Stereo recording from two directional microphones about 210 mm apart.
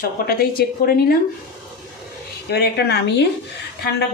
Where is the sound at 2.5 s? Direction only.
50° left (ahead or behind).